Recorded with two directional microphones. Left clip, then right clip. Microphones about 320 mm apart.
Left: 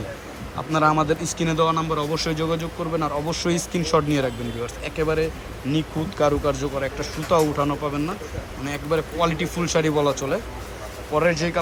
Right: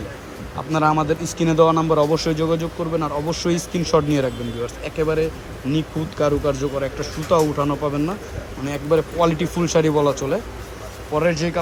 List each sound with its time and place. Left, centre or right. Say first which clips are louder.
0.5 s speech: right 1 dB; centre